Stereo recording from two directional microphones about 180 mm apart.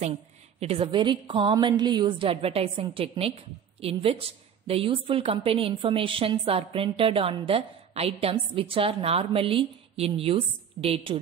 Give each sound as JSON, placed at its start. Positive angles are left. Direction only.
{"t": 0.0, "sound": "a woman's voice", "side_deg": -35}